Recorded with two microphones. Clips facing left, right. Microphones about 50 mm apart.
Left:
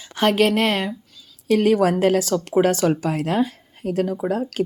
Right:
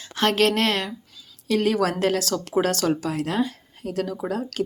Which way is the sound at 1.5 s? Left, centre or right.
Left.